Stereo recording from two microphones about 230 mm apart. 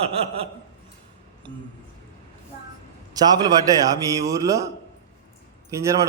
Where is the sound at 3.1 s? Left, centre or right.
Centre.